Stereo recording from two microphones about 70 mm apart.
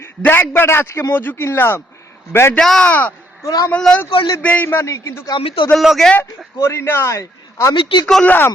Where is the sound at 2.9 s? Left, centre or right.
Left.